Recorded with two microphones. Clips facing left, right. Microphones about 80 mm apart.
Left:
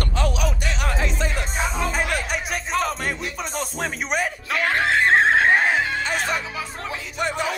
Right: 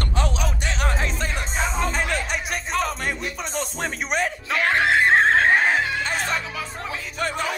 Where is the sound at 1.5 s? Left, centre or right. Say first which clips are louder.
Even; left.